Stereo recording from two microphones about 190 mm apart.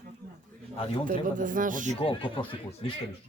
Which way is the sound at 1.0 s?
45° right (ahead or behind).